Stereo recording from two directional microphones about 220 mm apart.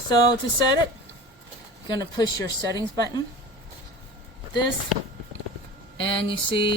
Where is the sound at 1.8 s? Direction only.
20° left (ahead or behind).